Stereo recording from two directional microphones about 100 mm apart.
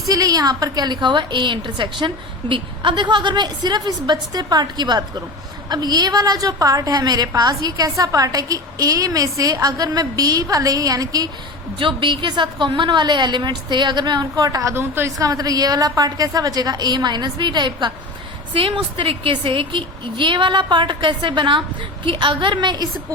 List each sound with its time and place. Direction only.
0.1 s a woman's voice: 40° right (ahead or behind)
11.8 s a woman's voice: 55° right (ahead or behind)
18.5 s a woman's voice: 60° right (ahead or behind)